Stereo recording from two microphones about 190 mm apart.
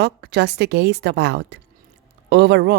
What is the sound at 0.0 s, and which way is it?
Speech, 60° right (ahead or behind).